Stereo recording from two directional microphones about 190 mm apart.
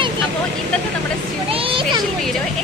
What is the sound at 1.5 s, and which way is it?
Speech, 30° right (ahead or behind).